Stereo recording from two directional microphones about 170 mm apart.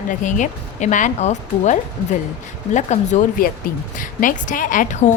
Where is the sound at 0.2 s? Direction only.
50° left (ahead or behind).